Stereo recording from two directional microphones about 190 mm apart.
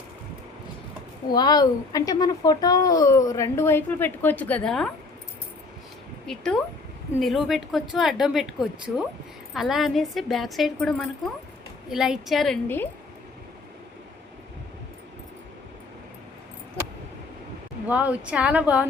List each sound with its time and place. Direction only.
1.3 s speech: 20° left (ahead or behind); by 4.9 s 5° left (ahead or behind)
6.2 s a woman's voice: 5° left (ahead or behind)
9.6 s a woman's voice: centre (ahead or behind)
12.6 s speech: 10° left (ahead or behind)
17.8 s speech: 5° right (ahead or behind)